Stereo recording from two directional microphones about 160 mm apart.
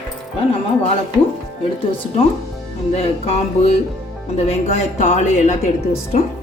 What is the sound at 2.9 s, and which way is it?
Speech, 40° left (ahead or behind).